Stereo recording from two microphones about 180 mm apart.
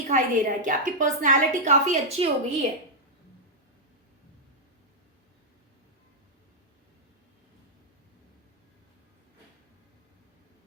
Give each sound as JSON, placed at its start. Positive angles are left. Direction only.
{"t": 0.1, "sound": "a woman's voice", "side_deg": -45}